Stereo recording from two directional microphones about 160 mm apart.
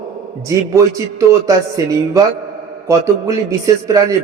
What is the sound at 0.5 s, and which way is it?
A man's voice, 20° right (ahead or behind).